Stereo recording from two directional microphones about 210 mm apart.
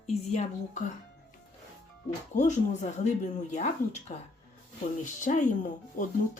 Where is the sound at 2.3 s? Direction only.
35° left (ahead or behind).